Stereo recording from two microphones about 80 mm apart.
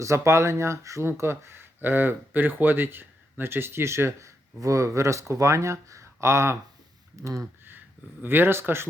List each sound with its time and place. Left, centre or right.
0.0 s speech: right
8.2 s speech: right